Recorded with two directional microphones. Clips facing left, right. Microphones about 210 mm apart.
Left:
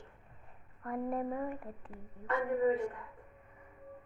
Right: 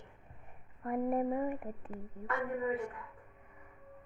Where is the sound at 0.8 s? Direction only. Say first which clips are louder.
Right 3 dB; 20° right (ahead or behind).